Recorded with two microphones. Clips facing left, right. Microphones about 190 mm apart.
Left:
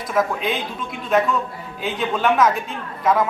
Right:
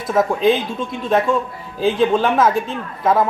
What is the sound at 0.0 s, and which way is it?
A man's voice, 25° right (ahead or behind).